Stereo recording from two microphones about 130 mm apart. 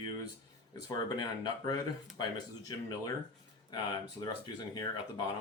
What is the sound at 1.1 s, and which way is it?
Speech, 30° left (ahead or behind).